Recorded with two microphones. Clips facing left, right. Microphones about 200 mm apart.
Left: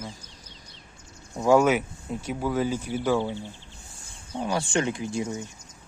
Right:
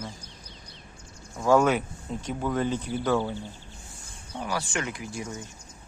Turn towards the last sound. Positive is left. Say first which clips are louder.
# left 6 dB
turn(degrees=20)  # may be behind; listen again after turning